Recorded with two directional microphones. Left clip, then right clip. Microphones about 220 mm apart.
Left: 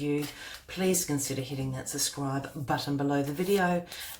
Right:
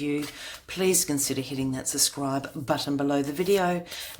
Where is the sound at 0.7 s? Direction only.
45° right (ahead or behind).